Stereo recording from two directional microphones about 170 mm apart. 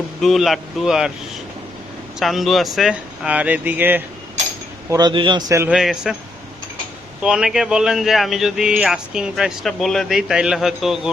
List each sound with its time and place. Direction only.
0.2 s speech: centre (ahead or behind)
2.1 s speech: centre (ahead or behind)
4.9 s speech: 25° right (ahead or behind)
5.5 s speech: 5° right (ahead or behind)
7.2 s speech: 5° right (ahead or behind)